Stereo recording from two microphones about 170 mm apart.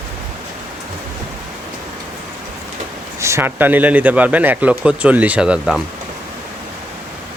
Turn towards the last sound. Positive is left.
turn(degrees=-5)  # may be behind; listen again after turning